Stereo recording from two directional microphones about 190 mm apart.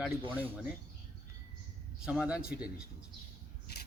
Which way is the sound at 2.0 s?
5° right (ahead or behind).